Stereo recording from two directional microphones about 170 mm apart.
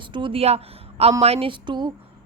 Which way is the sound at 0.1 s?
30° right (ahead or behind).